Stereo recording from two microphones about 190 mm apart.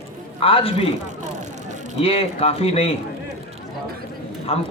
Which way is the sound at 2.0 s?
30° left (ahead or behind).